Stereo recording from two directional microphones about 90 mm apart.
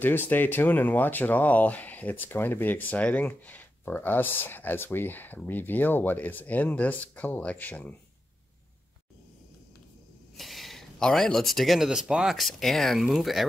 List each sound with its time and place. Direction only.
0.0 s speech: 20° left (ahead or behind)
10.3 s speech: centre (ahead or behind)